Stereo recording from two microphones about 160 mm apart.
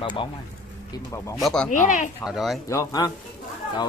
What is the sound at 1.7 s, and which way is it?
Speech, 50° left (ahead or behind).